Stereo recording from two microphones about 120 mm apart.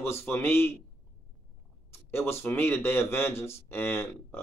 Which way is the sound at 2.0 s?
20° left (ahead or behind).